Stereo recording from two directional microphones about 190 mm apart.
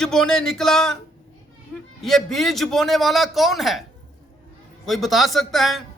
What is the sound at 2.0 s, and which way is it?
A man's voice, centre (ahead or behind).